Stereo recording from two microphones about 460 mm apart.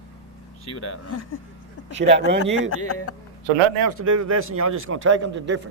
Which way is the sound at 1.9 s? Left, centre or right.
Centre.